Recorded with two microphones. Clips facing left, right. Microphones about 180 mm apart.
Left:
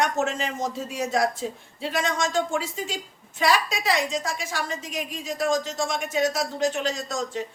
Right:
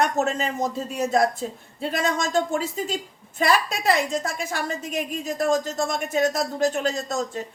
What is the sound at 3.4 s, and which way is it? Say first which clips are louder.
A woman's voice: right 2 dB; 55° right (ahead or behind).